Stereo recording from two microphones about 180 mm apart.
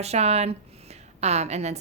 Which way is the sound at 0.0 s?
35° right (ahead or behind).